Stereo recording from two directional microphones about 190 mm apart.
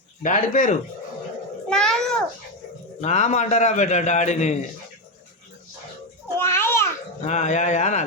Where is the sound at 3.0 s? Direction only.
35° left (ahead or behind).